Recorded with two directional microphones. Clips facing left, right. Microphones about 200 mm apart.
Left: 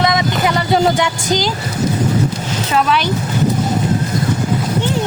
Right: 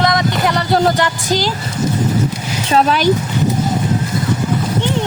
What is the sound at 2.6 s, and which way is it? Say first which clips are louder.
Speech: right 3 dB; 35° right (ahead or behind).